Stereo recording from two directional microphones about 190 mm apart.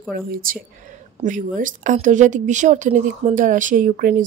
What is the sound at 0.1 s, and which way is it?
A woman's voice, 50° right (ahead or behind).